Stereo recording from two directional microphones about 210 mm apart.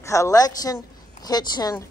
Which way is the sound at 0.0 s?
15° left (ahead or behind).